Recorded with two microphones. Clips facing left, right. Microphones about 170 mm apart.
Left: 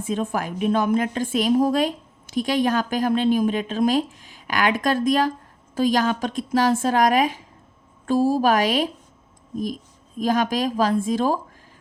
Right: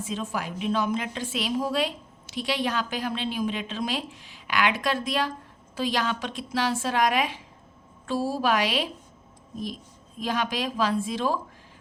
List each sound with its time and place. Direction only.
0.0 s a woman's voice: 55° left (ahead or behind)
10.2 s a woman's voice: 45° left (ahead or behind)